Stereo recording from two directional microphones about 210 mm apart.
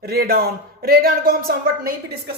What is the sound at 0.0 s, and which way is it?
Speech, 45° right (ahead or behind).